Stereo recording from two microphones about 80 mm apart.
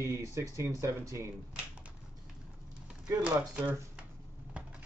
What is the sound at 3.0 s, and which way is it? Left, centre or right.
Speech, centre.